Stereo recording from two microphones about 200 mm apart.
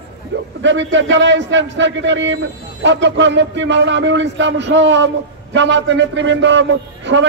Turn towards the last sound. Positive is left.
turn(degrees=-65)  # may be behind; listen again after turning